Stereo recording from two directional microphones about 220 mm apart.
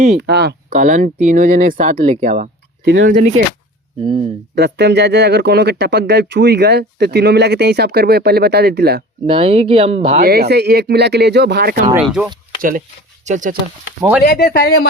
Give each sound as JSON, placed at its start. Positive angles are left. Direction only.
{"t": 0.2, "sound": "speech", "side_deg": -50}
{"t": 2.8, "sound": "speech", "side_deg": -55}
{"t": 3.1, "sound": "speech", "side_deg": -35}
{"t": 4.0, "sound": "speech", "side_deg": -20}
{"t": 4.5, "sound": "speech", "side_deg": -50}
{"t": 9.2, "sound": "speech", "side_deg": -25}
{"t": 10.2, "sound": "speech", "side_deg": -45}
{"t": 12.0, "sound": "speech", "side_deg": -5}
{"t": 13.2, "sound": "speech", "side_deg": -35}
{"t": 14.3, "sound": "speech", "side_deg": 45}